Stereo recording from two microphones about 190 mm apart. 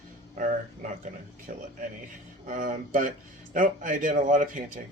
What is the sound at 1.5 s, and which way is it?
A man's voice, 50° right (ahead or behind).